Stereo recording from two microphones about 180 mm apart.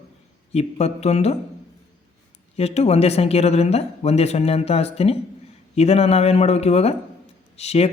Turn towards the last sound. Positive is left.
turn(degrees=35)  # may be behind; listen again after turning